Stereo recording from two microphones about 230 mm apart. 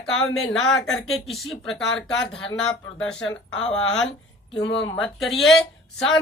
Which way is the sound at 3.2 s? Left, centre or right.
Left.